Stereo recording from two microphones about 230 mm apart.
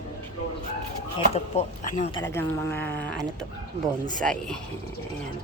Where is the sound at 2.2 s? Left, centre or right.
Centre.